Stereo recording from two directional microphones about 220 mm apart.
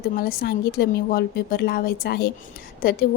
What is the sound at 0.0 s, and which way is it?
A woman's voice, 45° left (ahead or behind).